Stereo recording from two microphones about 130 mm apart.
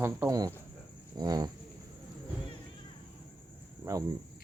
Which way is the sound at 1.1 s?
30° right (ahead or behind).